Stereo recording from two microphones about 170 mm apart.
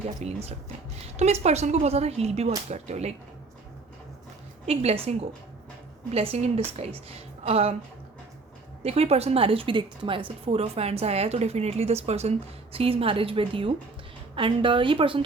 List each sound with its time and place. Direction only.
0.2 s a woman's voice: 40° right (ahead or behind)
4.6 s a woman's voice: 35° right (ahead or behind)
6.1 s a woman's voice: 35° right (ahead or behind)
8.8 s a woman's voice: 35° right (ahead or behind)